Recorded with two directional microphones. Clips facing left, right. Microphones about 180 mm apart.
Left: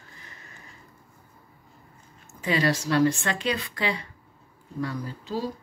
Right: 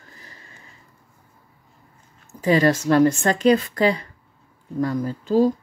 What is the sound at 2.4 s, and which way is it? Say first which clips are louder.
Speech: right 7 dB; 45° right (ahead or behind).